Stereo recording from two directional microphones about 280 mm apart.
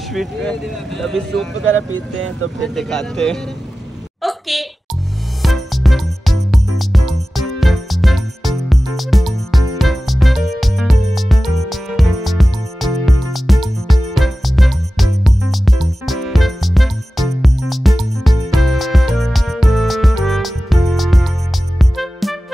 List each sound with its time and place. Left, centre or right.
0.1 s speech: centre
1.6 s speech: right
2.6 s speech: centre
4.2 s a sound: centre
5.4 s music: centre